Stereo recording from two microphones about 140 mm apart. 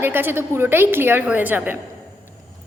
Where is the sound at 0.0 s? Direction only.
15° right (ahead or behind).